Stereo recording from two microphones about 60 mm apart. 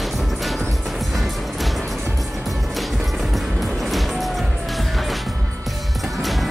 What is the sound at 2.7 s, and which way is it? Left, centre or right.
Music, centre.